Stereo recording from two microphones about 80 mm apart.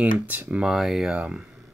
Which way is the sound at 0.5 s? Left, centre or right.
Centre.